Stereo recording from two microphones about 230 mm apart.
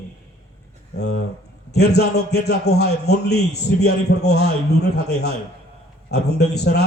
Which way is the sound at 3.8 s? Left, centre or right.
Left.